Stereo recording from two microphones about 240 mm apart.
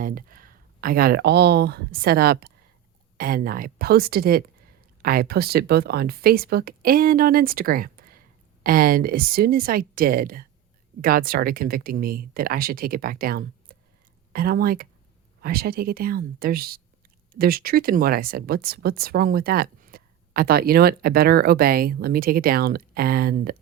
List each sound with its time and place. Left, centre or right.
0.0 s speech: right